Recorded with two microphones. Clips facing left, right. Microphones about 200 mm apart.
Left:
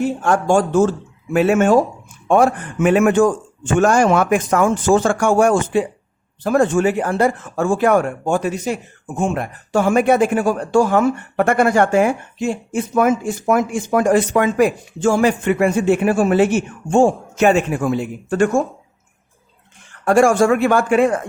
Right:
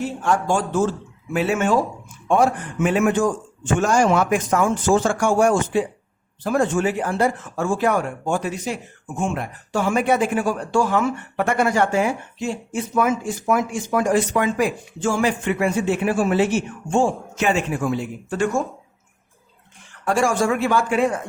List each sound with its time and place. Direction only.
0.0 s a man's voice: 50° left (ahead or behind)
20.1 s speech: 50° left (ahead or behind)